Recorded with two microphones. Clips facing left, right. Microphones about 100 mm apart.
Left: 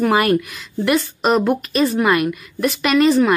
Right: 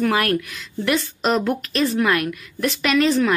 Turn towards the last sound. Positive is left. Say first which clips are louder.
# left 4 dB
turn(degrees=5)  # may be behind; listen again after turning